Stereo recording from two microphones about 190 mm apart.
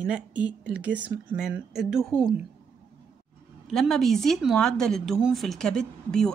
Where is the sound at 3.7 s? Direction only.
Centre (ahead or behind).